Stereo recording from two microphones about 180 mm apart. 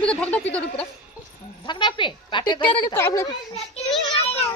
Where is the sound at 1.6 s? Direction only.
25° left (ahead or behind).